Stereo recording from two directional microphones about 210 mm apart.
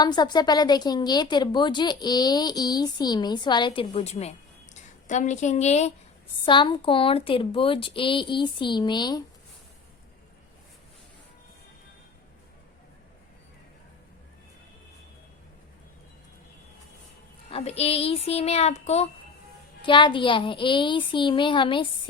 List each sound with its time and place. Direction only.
0.0 s a woman's voice: 20° left (ahead or behind)
17.5 s a woman's voice: 30° left (ahead or behind)